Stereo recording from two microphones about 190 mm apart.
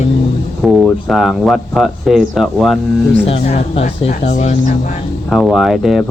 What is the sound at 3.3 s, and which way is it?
Speech, 30° left (ahead or behind).